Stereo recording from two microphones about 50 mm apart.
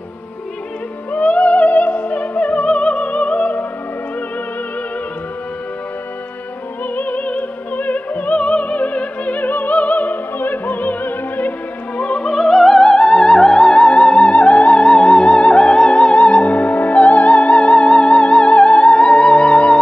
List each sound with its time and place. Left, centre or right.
1.1 s music: left
7.0 s music: left
12.0 s opera: left
12.3 s music: centre